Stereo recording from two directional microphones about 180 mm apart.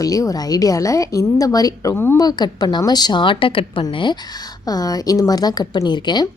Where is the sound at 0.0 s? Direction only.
20° left (ahead or behind).